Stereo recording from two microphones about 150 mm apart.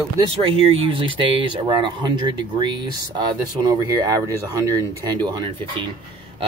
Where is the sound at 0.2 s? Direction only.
35° right (ahead or behind).